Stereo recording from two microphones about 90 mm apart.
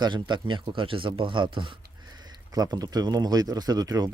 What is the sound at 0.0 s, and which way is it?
A man's voice, 55° right (ahead or behind).